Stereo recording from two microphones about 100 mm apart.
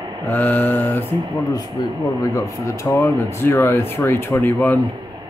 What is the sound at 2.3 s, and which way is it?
Speech, 35° left (ahead or behind).